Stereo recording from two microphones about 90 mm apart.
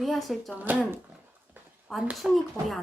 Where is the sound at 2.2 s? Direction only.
Centre (ahead or behind).